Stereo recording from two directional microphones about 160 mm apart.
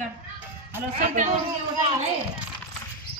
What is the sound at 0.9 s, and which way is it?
Speech, 50° right (ahead or behind).